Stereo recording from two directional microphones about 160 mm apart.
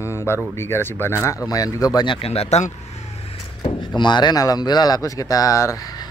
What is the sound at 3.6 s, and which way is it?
A man's voice, 30° left (ahead or behind).